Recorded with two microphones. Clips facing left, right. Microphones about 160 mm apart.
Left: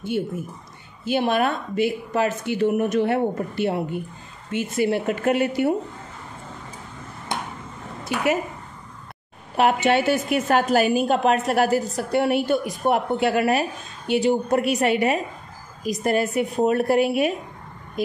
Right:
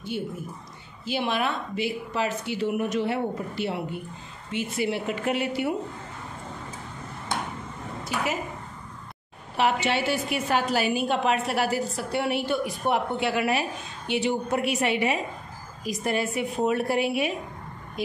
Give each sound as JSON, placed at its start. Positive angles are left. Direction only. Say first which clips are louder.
{"t": 1.0, "sound": "a woman's voice", "louder": "left 6 dB", "side_deg": 50}
{"t": 9.6, "sound": "a woman's voice", "louder": "left 5 dB", "side_deg": 50}